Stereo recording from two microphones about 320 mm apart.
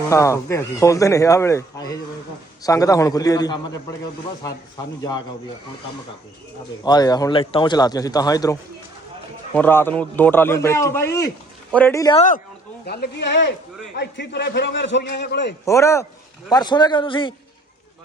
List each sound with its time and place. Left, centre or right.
0.1 s speech: centre
6.8 s speech: centre
12.8 s a man's voice: left
15.6 s speech: centre